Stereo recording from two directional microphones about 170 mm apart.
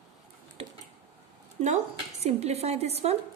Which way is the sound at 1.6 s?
40° right (ahead or behind).